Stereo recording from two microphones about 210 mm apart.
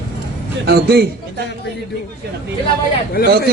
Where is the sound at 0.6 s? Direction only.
50° right (ahead or behind).